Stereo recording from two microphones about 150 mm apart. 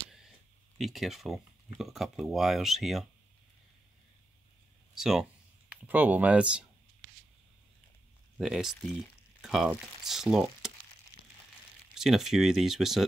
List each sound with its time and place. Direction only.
0.7 s speech: centre (ahead or behind)
4.9 s speech: 5° right (ahead or behind)
8.4 s speech: 5° right (ahead or behind)
11.9 s speech: 5° right (ahead or behind)